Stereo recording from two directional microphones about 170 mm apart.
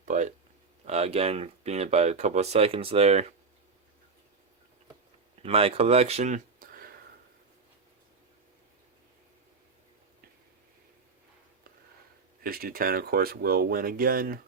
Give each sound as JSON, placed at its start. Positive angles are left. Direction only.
{"t": 0.0, "sound": "a sound", "side_deg": -45}
{"t": 0.9, "sound": "speech", "side_deg": -40}
{"t": 5.4, "sound": "speech", "side_deg": -35}
{"t": 12.4, "sound": "speech", "side_deg": -60}